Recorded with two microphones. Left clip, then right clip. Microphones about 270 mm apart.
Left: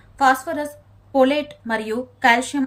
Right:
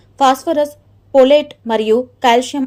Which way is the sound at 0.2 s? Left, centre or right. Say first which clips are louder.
Right 5 dB; centre.